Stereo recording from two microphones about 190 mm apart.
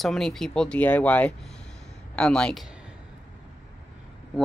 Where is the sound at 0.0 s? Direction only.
Centre (ahead or behind).